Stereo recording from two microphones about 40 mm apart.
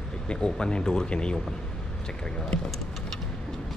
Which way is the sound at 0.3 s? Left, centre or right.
Left.